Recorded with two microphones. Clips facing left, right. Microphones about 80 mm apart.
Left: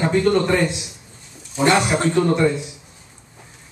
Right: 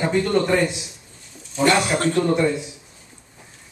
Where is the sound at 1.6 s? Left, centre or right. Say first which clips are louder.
Left 1 dB; left.